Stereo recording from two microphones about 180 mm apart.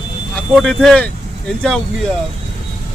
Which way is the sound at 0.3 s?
5° left (ahead or behind).